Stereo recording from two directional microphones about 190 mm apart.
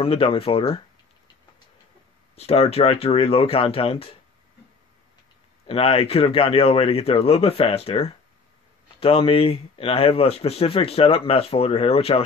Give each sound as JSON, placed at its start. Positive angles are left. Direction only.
{"t": 0.0, "sound": "speech", "side_deg": 30}
{"t": 2.3, "sound": "speech", "side_deg": 35}
{"t": 5.7, "sound": "speech", "side_deg": 30}